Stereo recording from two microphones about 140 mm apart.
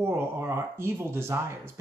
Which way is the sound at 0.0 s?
20° right (ahead or behind).